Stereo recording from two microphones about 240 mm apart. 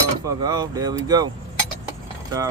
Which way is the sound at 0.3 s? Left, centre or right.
Centre.